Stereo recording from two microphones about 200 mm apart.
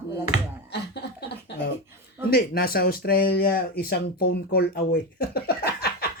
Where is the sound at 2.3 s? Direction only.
50° left (ahead or behind).